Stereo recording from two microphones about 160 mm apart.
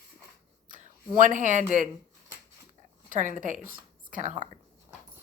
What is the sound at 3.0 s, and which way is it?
A woman's voice, 55° right (ahead or behind).